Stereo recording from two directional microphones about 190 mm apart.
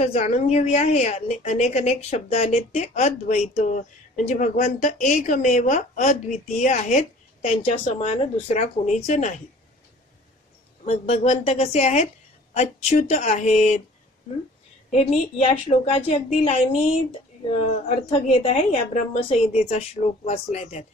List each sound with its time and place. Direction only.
0.0 s a woman's voice: 35° left (ahead or behind)
10.9 s a woman's voice: 30° left (ahead or behind)
14.9 s a woman's voice: 35° left (ahead or behind)
17.8 s a woman's voice: 35° left (ahead or behind)